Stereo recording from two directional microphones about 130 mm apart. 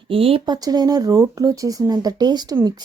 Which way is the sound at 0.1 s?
45° right (ahead or behind).